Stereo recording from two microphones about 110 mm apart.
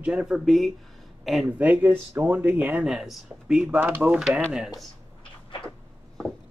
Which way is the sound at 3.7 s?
15° right (ahead or behind).